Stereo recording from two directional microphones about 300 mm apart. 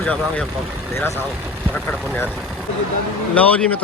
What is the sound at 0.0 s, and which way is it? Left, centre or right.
Speech, centre.